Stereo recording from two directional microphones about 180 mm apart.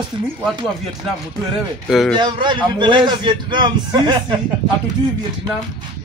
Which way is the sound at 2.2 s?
25° right (ahead or behind).